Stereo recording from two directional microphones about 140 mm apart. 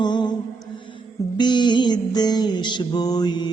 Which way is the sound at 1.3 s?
30° left (ahead or behind).